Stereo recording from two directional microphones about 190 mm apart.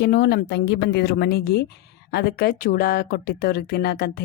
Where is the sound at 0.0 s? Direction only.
60° left (ahead or behind).